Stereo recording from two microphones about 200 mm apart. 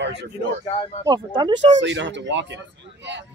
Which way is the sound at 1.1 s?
20° right (ahead or behind).